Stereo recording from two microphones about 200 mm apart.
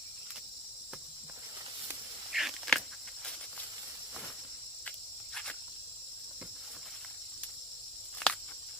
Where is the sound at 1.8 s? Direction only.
Centre (ahead or behind).